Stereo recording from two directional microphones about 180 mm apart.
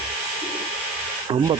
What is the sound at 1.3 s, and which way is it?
Speech, 25° right (ahead or behind).